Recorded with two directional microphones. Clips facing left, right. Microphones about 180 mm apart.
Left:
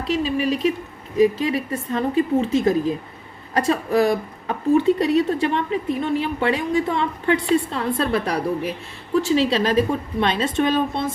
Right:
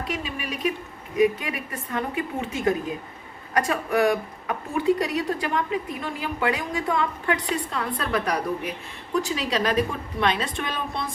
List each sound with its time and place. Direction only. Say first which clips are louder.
0.0 s a woman's voice: left 9 dB; 30° left (ahead or behind)